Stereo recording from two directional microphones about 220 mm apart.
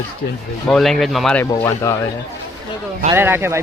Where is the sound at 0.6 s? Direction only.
Centre (ahead or behind).